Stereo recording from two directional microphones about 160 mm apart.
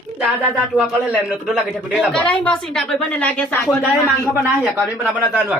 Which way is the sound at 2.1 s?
5° left (ahead or behind).